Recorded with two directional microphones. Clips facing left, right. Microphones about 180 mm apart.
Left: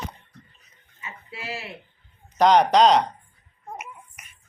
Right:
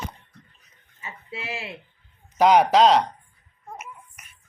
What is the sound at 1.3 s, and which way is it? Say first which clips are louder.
Speech: right 1 dB; 20° right (ahead or behind).